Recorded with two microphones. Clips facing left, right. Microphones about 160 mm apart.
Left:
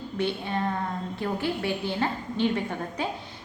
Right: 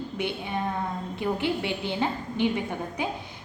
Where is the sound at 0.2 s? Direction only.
15° right (ahead or behind).